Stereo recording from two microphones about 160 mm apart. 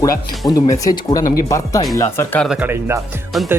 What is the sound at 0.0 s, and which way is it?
Speech, 20° left (ahead or behind).